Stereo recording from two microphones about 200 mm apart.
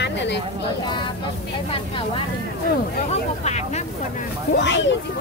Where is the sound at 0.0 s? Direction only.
60° left (ahead or behind).